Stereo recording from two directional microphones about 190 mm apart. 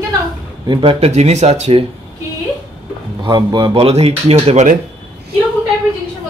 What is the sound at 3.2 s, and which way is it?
A man's voice, 25° right (ahead or behind).